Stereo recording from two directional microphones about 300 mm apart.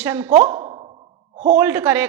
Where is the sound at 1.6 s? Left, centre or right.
Centre.